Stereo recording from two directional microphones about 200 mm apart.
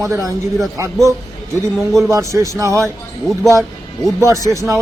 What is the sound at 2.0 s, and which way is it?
Speech, 15° right (ahead or behind).